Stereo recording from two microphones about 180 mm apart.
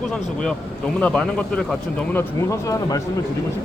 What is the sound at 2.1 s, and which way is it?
Speech, 15° left (ahead or behind).